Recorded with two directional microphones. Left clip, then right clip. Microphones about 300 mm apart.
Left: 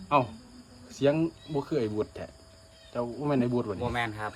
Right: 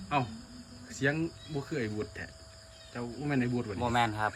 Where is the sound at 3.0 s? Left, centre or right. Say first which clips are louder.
Left 5 dB; centre.